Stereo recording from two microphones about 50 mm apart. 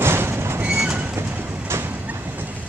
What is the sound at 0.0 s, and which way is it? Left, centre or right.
Train, right.